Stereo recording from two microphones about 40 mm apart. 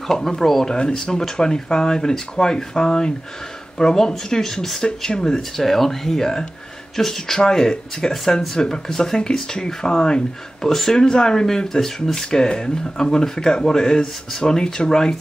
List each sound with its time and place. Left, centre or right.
0.1 s speech: centre
0.7 s speech: left
8.1 s speech: centre